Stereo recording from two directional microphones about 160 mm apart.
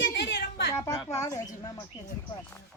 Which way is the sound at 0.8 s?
20° left (ahead or behind).